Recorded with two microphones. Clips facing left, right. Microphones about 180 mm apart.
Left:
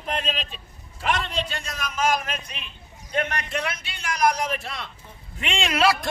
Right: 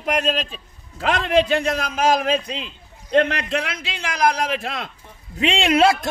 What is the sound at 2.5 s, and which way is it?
A man's voice, 90° right.